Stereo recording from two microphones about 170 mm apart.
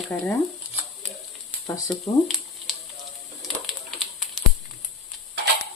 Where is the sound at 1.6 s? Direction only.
20° left (ahead or behind).